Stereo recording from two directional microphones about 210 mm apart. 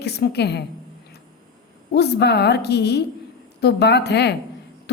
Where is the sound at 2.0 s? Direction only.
50° left (ahead or behind).